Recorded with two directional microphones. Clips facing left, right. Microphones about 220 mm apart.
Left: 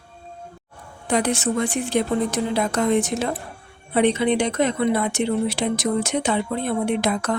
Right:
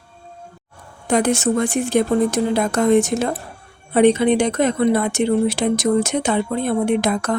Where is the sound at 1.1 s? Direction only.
45° right (ahead or behind).